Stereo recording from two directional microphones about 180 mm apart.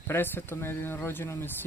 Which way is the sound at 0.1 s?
10° left (ahead or behind).